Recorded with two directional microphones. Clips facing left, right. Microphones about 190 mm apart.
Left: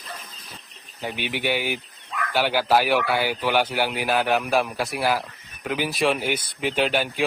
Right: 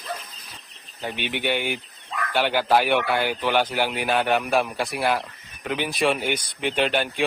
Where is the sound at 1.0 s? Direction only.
5° left (ahead or behind).